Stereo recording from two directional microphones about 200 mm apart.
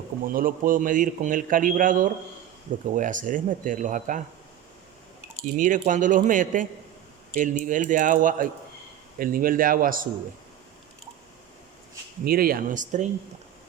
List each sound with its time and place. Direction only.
0.3 s a man's voice: 45° right (ahead or behind)
5.5 s a man's voice: 40° right (ahead or behind)
12.2 s a man's voice: 50° right (ahead or behind)